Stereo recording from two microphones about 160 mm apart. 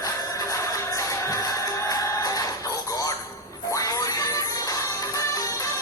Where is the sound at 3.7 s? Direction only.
20° left (ahead or behind).